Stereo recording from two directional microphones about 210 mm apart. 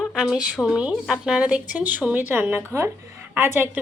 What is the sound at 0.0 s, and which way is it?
A woman's voice, centre (ahead or behind).